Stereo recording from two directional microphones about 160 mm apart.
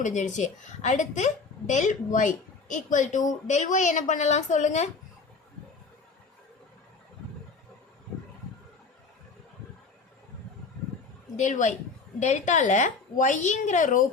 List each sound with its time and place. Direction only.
0.0 s a woman's voice: 50° left (ahead or behind)
11.3 s a woman's voice: 50° left (ahead or behind)